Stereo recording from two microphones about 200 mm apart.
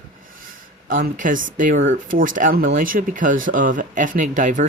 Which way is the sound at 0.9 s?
40° right (ahead or behind).